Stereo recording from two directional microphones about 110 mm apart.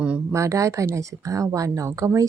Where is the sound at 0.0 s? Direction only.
10° right (ahead or behind).